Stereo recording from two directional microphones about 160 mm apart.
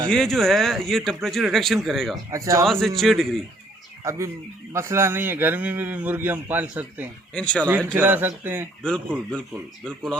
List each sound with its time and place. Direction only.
0.1 s speech: 5° left (ahead or behind)
2.3 s speech: 20° right (ahead or behind)
2.6 s speech: centre (ahead or behind)
4.7 s speech: 15° right (ahead or behind)
7.3 s speech: 5° left (ahead or behind)
7.9 s speech: 10° right (ahead or behind)
8.8 s speech: 5° left (ahead or behind)